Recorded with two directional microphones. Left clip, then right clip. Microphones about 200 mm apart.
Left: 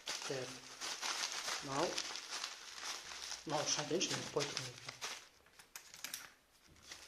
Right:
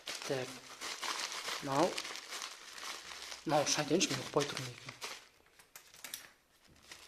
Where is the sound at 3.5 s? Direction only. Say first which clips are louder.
Right 7 dB; 55° right (ahead or behind).